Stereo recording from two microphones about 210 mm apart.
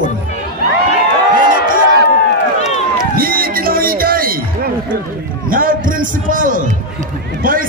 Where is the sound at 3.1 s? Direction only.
45° right (ahead or behind).